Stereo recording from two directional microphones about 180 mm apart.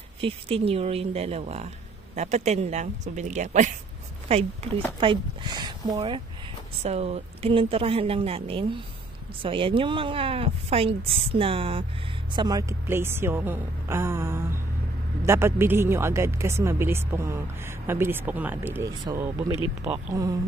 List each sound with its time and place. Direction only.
0.2 s speech: 30° right (ahead or behind)